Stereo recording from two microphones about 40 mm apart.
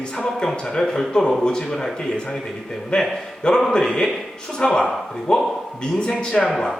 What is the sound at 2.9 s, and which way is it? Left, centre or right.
Speech, centre.